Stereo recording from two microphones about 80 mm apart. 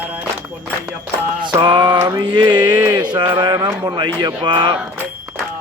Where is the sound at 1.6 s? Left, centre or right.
Right.